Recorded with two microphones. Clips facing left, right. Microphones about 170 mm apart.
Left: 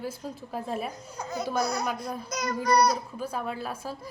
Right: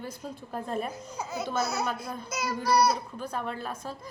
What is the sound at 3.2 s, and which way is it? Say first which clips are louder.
Speech: left 1 dB; 5° left (ahead or behind).